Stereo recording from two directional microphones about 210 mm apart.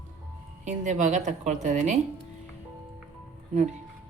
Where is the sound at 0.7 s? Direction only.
35° right (ahead or behind).